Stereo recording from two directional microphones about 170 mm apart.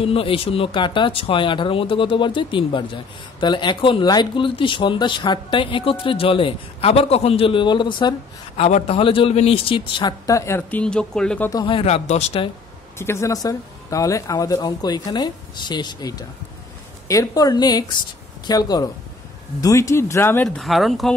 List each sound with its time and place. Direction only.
0.0 s speech: 35° left (ahead or behind)
8.5 s speech: 40° left (ahead or behind); by 11.5 s 5° left (ahead or behind)
11.5 s speech: 30° left (ahead or behind)
13.0 s speech: 15° left (ahead or behind)
20.4 s speech: centre (ahead or behind)